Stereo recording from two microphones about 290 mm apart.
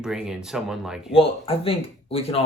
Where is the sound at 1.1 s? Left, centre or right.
Centre.